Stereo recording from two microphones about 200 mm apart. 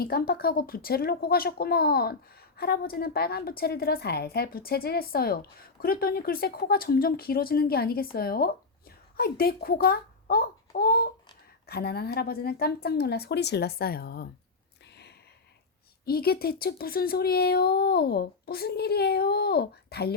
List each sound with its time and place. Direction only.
0.0 s a child's voice: 50° left (ahead or behind)
16.0 s speech: 50° left (ahead or behind)